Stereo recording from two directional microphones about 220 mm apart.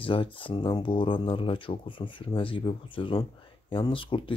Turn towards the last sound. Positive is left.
turn(degrees=25)  # may be behind; listen again after turning